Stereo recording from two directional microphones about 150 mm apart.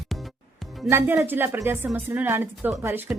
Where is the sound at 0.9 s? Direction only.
15° right (ahead or behind).